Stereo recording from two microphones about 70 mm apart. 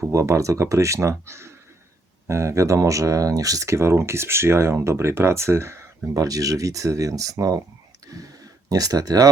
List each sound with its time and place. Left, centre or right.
0.1 s speech: right
6.1 s speech: right
8.0 s a sound: right